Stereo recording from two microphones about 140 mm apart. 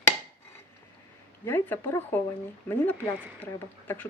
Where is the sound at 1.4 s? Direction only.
15° left (ahead or behind).